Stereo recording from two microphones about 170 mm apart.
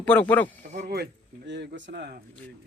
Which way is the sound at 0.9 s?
80° right.